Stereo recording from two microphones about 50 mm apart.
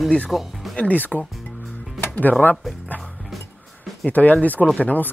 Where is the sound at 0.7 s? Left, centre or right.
Left.